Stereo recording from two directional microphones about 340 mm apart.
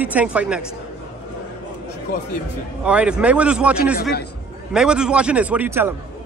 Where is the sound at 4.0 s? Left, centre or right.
Left.